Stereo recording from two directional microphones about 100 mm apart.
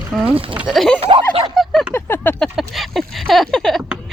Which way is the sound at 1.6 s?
Centre (ahead or behind).